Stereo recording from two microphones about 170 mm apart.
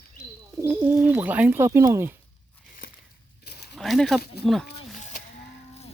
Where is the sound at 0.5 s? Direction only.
10° right (ahead or behind).